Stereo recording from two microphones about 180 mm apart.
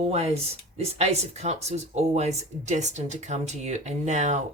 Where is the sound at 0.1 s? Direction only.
35° right (ahead or behind).